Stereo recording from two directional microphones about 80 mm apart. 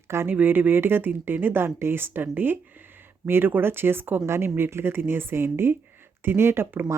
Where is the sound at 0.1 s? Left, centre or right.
Right.